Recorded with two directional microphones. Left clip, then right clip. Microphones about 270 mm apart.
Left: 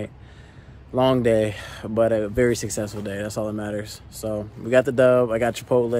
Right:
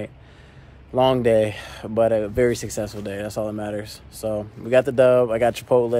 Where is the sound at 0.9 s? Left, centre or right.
Centre.